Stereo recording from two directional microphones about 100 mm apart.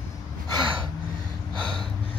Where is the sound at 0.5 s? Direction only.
55° right (ahead or behind).